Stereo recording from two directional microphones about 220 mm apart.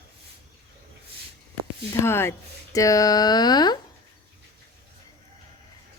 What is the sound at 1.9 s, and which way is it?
Speech, 10° left (ahead or behind).